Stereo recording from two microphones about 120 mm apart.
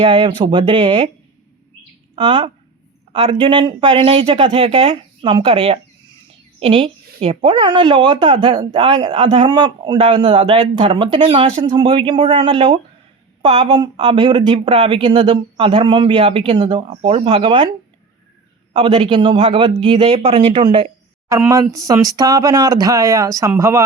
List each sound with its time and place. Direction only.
0.0 s speech: 45° right (ahead or behind)
2.1 s speech: 45° right (ahead or behind)
9.5 s a man's voice: 35° right (ahead or behind)
18.7 s speech: 45° right (ahead or behind)
21.2 s speech: 25° right (ahead or behind)